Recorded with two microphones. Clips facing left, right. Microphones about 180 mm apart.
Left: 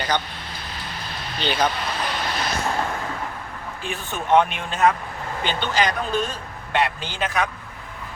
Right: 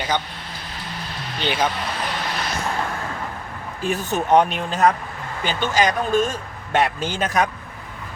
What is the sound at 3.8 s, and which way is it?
Speech, 40° right (ahead or behind).